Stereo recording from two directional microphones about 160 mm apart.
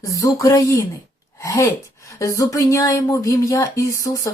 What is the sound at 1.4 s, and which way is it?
Gasp, 15° left (ahead or behind).